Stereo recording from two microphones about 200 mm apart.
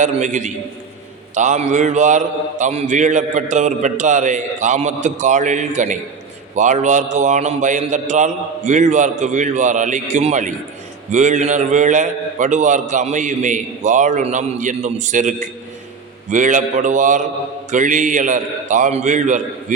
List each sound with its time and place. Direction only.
0.0 s a man's voice: 35° right (ahead or behind)